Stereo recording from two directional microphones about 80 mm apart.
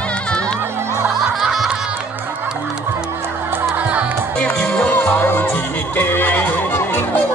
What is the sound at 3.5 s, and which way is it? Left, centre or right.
Music, right.